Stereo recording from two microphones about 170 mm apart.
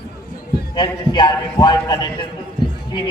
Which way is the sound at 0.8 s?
25° left (ahead or behind).